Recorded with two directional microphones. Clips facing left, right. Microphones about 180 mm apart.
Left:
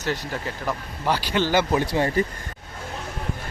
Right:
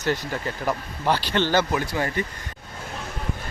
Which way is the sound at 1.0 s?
5° left (ahead or behind).